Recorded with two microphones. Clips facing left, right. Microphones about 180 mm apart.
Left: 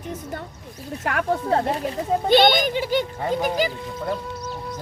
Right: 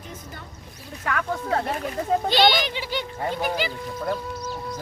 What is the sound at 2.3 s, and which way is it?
Speech, 50° left (ahead or behind).